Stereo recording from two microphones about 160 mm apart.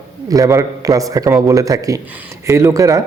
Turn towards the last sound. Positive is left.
turn(degrees=-20)  # may be behind; listen again after turning